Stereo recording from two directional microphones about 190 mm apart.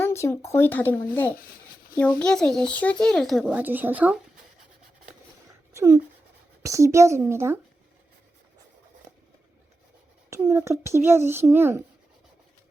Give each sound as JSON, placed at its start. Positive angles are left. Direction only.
{"t": 0.0, "sound": "a child's voice", "side_deg": 15}
{"t": 5.7, "sound": "a child's voice", "side_deg": -15}
{"t": 10.2, "sound": "a child's voice", "side_deg": -15}